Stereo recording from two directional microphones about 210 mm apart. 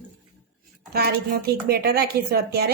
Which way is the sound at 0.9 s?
50° right (ahead or behind).